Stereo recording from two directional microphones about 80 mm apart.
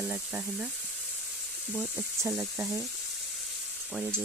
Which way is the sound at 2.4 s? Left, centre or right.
Right.